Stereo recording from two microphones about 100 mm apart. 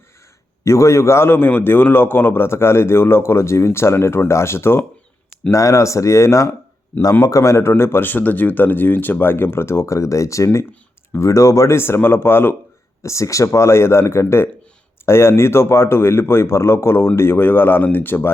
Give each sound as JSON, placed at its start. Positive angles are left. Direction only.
{"t": 0.6, "sound": "a man's voice", "side_deg": 30}